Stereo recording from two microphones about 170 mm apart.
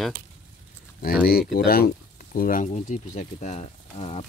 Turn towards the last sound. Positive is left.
turn(degrees=35)  # may be behind; listen again after turning